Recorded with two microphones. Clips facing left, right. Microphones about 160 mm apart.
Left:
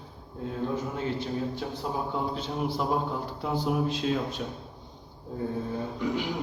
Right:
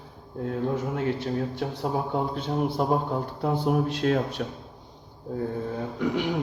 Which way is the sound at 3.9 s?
65° right (ahead or behind).